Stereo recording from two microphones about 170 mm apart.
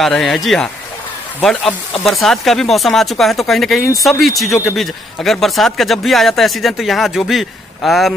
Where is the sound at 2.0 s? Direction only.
Centre (ahead or behind).